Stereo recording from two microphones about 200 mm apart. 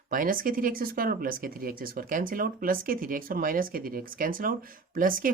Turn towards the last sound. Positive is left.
turn(degrees=-45)  # may be behind; listen again after turning